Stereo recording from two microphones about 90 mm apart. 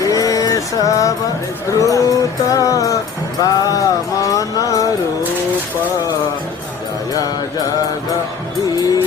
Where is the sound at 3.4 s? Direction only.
45° left (ahead or behind).